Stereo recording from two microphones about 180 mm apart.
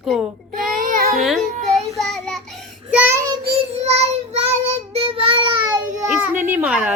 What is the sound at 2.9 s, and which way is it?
Child singing, 10° right (ahead or behind).